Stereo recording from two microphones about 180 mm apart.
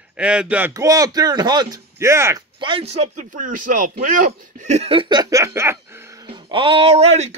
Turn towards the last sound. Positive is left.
turn(degrees=-35)  # may be behind; listen again after turning